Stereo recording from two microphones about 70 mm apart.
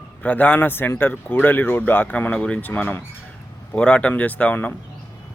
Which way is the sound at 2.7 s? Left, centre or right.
Left.